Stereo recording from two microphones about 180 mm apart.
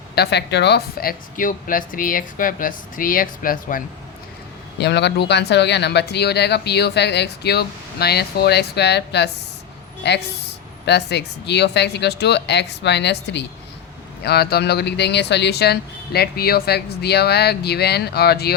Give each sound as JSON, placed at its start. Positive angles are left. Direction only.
{"t": 0.2, "sound": "speech", "side_deg": 70}
{"t": 4.8, "sound": "speech", "side_deg": 70}